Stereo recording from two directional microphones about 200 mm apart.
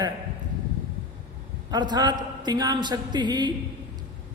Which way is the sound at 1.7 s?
20° right (ahead or behind).